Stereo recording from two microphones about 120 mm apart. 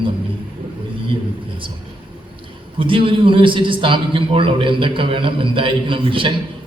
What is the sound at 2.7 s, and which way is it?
A man's voice, 45° right (ahead or behind).